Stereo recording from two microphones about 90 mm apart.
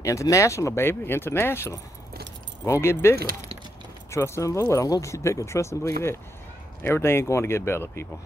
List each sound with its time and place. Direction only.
0.0 s speech: 35° left (ahead or behind)